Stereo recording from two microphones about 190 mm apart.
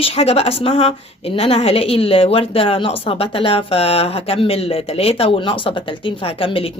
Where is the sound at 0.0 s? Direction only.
30° left (ahead or behind).